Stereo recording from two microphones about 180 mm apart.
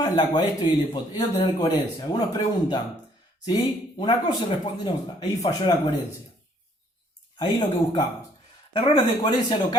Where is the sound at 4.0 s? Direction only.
25° left (ahead or behind).